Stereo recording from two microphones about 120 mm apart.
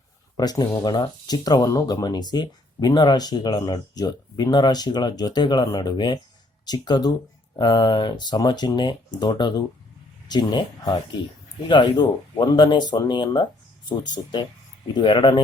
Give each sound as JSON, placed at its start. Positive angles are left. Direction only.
{"t": 0.3, "sound": "speech", "side_deg": 35}